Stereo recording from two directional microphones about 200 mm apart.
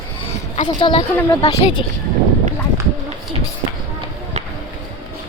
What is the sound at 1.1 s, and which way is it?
Speech, 10° left (ahead or behind).